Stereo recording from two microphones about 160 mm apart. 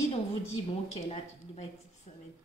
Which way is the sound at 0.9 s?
40° left (ahead or behind).